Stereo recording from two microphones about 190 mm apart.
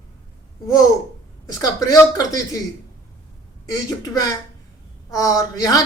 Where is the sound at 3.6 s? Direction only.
20° left (ahead or behind).